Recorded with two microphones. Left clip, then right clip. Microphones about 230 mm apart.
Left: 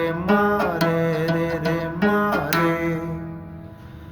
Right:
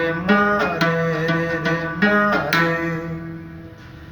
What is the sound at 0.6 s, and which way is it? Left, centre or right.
Music, left.